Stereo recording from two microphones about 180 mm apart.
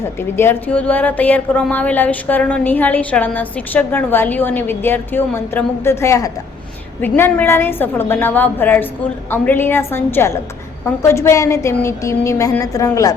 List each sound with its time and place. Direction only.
0.2 s a woman's voice: 15° left (ahead or behind)